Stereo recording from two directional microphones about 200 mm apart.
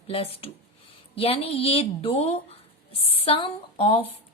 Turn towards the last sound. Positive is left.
turn(degrees=25)  # may be behind; listen again after turning